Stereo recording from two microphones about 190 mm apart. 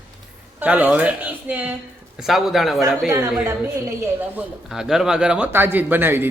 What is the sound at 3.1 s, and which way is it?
Speech, 15° right (ahead or behind).